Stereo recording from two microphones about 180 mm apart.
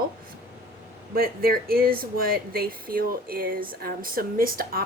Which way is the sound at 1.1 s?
55° right (ahead or behind).